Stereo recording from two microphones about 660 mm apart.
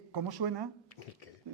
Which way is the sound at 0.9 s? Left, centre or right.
Left.